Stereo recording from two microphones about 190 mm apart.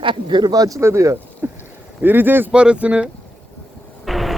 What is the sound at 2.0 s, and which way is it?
Speech, 10° right (ahead or behind).